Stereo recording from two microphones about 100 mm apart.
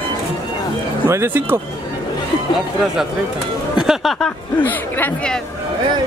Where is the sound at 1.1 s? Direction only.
20° right (ahead or behind).